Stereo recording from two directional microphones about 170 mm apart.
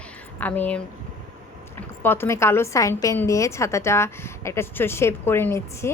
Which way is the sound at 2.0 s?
10° left (ahead or behind).